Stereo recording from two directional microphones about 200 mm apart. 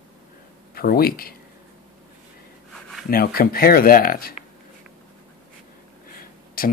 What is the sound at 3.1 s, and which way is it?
Speech, 50° left (ahead or behind).